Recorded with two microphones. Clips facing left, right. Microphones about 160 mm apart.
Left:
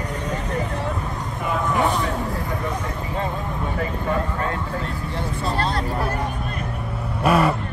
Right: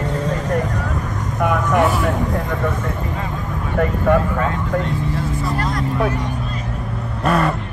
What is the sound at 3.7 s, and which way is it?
Vehicle, 70° right (ahead or behind).